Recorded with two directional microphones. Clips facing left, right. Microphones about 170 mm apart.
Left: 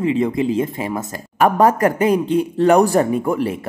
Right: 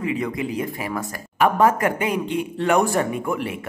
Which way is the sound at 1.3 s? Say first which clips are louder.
Left 3 dB; 40° left (ahead or behind).